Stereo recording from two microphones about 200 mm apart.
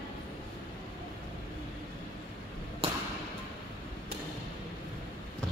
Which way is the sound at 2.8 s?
25° right (ahead or behind).